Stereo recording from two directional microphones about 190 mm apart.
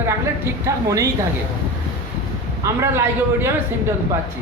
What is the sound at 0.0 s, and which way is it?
A woman's voice, 15° right (ahead or behind).